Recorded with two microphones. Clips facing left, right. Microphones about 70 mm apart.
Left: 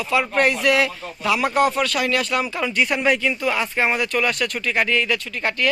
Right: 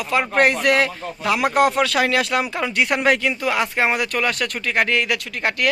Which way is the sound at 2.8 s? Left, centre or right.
Right.